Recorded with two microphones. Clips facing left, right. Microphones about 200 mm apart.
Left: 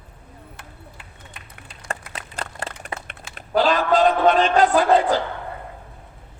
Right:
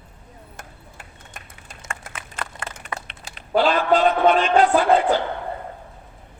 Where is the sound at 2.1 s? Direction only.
35° left (ahead or behind).